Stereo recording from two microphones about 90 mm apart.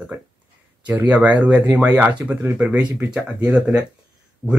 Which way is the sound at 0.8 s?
15° right (ahead or behind).